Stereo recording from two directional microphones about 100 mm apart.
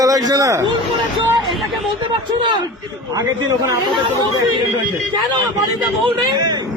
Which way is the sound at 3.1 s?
35° right (ahead or behind).